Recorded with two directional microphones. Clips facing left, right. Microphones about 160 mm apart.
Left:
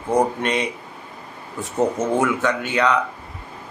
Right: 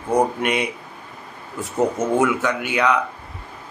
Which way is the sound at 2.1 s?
10° right (ahead or behind).